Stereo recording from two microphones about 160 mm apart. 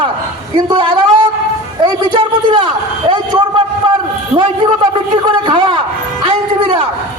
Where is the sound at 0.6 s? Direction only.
30° right (ahead or behind).